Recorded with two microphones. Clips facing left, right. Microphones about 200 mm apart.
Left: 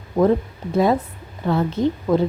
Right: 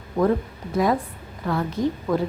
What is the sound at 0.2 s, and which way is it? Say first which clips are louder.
A woman's voice: left 4 dB; 25° left (ahead or behind).